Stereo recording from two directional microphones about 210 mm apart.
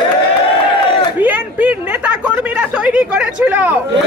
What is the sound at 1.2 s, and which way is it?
Speech, 5° right (ahead or behind).